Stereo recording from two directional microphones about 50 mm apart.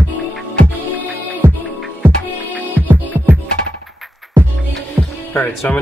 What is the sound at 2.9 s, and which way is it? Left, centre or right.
Music, right.